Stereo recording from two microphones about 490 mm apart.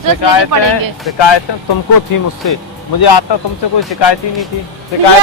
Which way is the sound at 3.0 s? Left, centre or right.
Left.